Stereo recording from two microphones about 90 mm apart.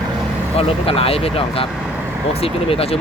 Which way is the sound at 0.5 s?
90° left.